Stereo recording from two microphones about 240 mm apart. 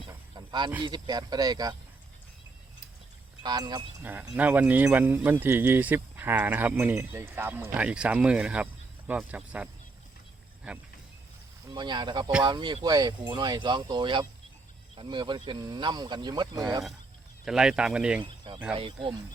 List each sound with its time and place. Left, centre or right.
0.1 s a sound: centre
0.8 s speech: centre
3.4 s speech: centre
11.7 s speech: centre
17.4 s speech: centre
18.2 s speech: centre